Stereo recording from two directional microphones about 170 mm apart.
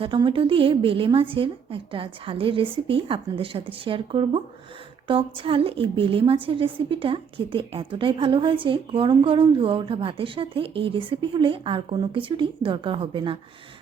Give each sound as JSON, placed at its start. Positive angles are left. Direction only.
{"t": 0.0, "sound": "a woman's voice", "side_deg": -30}